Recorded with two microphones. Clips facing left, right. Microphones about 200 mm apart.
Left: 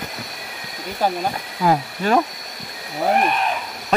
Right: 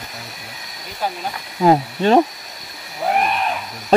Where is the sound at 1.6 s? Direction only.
25° right (ahead or behind).